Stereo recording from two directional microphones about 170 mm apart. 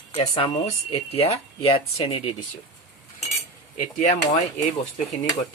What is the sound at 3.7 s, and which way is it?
Speech, 50° left (ahead or behind).